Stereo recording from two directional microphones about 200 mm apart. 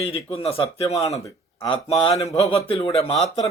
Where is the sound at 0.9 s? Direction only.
15° left (ahead or behind).